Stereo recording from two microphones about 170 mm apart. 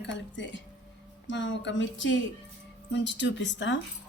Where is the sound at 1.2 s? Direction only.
90° left.